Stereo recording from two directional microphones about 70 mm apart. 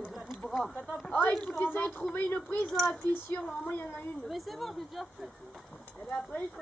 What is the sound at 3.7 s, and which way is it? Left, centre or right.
Speech, left.